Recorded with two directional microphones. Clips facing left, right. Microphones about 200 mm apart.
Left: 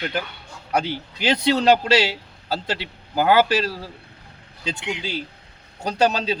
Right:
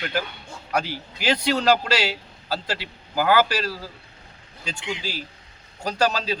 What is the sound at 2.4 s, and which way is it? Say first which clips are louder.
A man's voice: left 2 dB; 25° left (ahead or behind).